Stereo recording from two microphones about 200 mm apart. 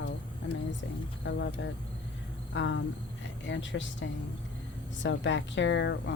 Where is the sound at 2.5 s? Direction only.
70° left (ahead or behind).